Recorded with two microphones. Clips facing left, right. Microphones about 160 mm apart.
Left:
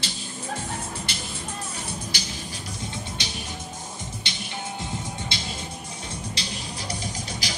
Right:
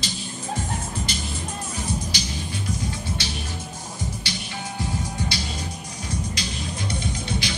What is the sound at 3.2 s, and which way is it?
Music, 20° left (ahead or behind).